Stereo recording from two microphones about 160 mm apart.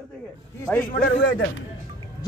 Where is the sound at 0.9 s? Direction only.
65° left (ahead or behind).